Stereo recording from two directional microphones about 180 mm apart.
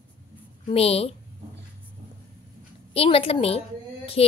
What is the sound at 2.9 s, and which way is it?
A woman's voice, 35° left (ahead or behind).